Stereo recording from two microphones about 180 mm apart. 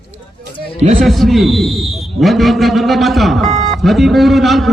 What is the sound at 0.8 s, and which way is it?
Speech, 40° right (ahead or behind).